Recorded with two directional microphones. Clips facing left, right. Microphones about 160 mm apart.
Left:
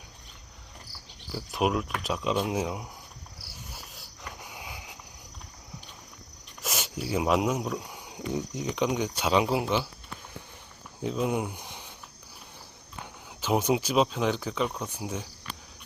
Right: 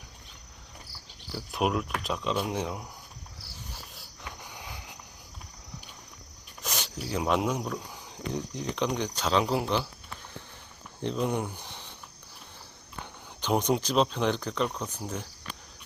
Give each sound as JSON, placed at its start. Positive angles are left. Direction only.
{"t": 1.5, "sound": "speech", "side_deg": 0}
{"t": 3.7, "sound": "a sound", "side_deg": 0}
{"t": 6.6, "sound": "speech", "side_deg": 5}
{"t": 11.0, "sound": "speech", "side_deg": 5}
{"t": 13.4, "sound": "speech", "side_deg": 5}